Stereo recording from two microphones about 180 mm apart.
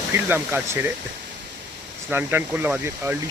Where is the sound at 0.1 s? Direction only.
10° right (ahead or behind).